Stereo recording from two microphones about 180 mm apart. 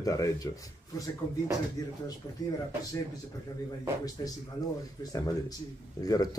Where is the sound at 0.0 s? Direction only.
20° left (ahead or behind).